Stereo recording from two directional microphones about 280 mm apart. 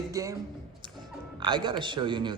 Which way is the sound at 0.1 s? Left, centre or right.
Centre.